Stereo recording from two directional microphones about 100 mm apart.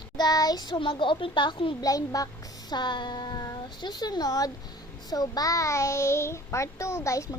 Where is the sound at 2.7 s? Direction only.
50° left (ahead or behind).